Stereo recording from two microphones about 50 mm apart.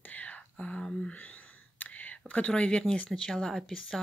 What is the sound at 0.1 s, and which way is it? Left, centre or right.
Whispering, left.